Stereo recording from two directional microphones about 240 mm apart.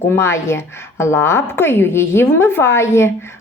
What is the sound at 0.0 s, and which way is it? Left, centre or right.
A woman's voice, centre.